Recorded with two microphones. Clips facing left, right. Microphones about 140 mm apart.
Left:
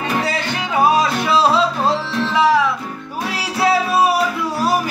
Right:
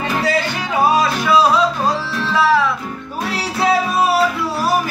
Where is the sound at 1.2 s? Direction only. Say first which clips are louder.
Right 1 dB; 25° left (ahead or behind).